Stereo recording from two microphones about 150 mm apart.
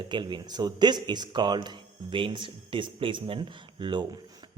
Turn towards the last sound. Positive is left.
turn(degrees=-35)  # may be behind; listen again after turning